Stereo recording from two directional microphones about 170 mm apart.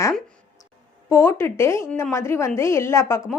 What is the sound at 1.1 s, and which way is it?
A woman's voice, 15° left (ahead or behind).